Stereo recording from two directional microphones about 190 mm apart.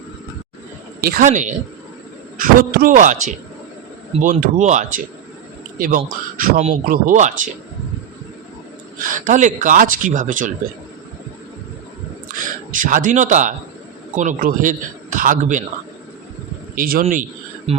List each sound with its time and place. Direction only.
1.0 s a man's voice: 50° right (ahead or behind)
6.4 s speech: 35° right (ahead or behind)
6.8 s a man's voice: 45° right (ahead or behind)
9.0 s a man's voice: 45° right (ahead or behind)
12.7 s a man's voice: 45° right (ahead or behind)
16.7 s a man's voice: 50° right (ahead or behind)
17.7 s speech: 35° right (ahead or behind)